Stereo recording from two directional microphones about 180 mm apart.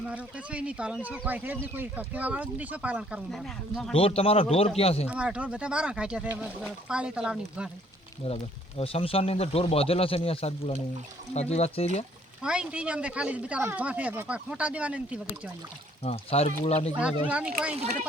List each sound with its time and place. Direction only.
0.1 s speech: 5° right (ahead or behind)
3.9 s speech: 30° left (ahead or behind)
5.0 s speech: 5° right (ahead or behind)
8.2 s speech: 30° left (ahead or behind)
12.4 s speech: 5° right (ahead or behind)
16.0 s speech: 35° left (ahead or behind)
17.2 s speech: 5° right (ahead or behind)
17.7 s speech: 40° right (ahead or behind)